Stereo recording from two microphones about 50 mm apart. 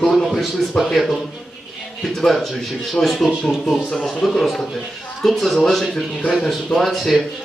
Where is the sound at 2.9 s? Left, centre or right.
Centre.